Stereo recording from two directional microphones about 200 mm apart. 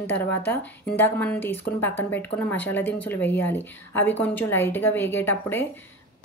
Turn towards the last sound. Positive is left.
turn(degrees=10)  # may be behind; listen again after turning